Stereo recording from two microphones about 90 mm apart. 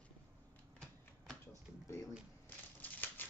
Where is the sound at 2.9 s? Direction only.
20° left (ahead or behind).